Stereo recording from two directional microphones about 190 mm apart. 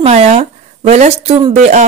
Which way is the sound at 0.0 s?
35° right (ahead or behind).